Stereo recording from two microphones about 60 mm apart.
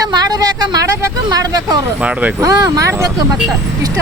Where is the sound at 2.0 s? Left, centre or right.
Centre.